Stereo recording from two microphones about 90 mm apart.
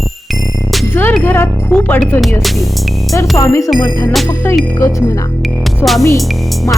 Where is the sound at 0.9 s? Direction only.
25° left (ahead or behind).